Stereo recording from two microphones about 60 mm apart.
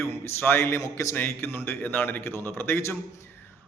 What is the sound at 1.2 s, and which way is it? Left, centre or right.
A man's voice, left.